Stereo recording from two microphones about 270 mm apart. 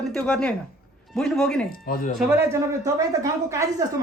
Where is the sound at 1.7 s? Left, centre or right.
Left.